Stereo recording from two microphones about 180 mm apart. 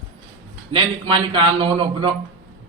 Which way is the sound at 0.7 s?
30° right (ahead or behind).